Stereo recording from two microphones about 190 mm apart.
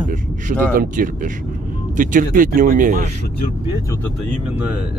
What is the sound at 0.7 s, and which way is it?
Speech, 45° right (ahead or behind).